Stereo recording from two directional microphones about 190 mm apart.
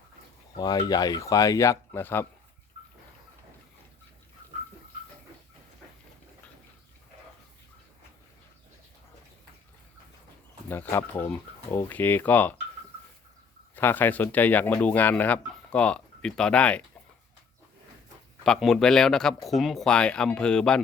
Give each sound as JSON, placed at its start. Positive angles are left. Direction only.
{"t": 0.5, "sound": "speech", "side_deg": 20}
{"t": 10.7, "sound": "speech", "side_deg": 10}
{"t": 13.7, "sound": "speech", "side_deg": 10}
{"t": 18.4, "sound": "speech", "side_deg": 0}